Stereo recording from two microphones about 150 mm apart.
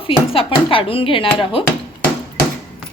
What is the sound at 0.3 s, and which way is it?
A woman's voice, 35° left (ahead or behind).